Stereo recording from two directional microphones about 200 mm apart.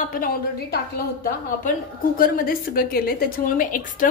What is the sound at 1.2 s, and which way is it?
A woman's voice, 45° left (ahead or behind).